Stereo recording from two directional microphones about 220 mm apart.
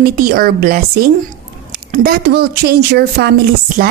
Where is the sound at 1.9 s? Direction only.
45° right (ahead or behind).